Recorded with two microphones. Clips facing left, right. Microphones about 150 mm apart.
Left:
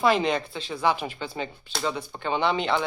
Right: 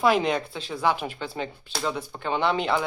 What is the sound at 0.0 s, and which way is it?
Speech, 5° right (ahead or behind).